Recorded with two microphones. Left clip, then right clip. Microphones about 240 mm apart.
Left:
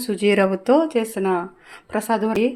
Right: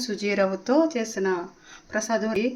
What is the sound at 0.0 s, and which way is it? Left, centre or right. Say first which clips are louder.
Speech: left 6 dB; left.